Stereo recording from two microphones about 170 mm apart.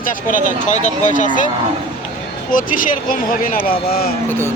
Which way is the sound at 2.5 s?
55° left (ahead or behind).